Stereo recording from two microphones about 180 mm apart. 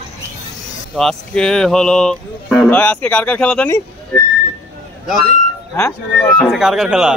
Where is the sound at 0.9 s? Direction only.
5° left (ahead or behind).